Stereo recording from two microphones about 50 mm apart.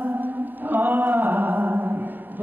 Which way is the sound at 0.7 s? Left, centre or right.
Right.